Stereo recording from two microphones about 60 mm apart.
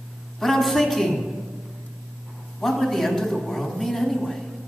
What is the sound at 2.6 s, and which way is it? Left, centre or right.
A man's voice, centre.